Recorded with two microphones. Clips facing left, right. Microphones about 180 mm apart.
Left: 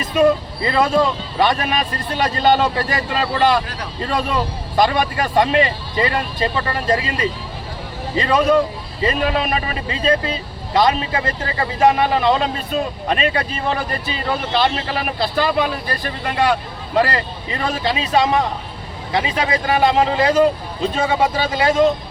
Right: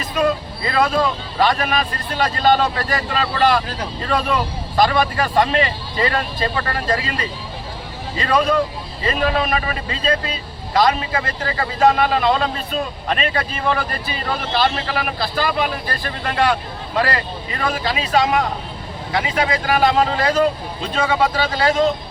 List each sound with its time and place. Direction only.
0.2 s a man's voice: 25° left (ahead or behind)